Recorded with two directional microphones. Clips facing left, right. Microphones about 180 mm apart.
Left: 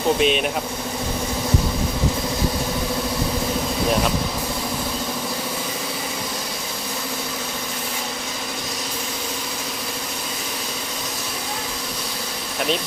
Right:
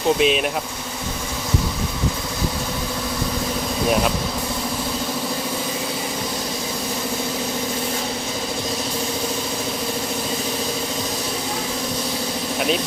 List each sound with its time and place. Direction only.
0.2 s speech: centre (ahead or behind)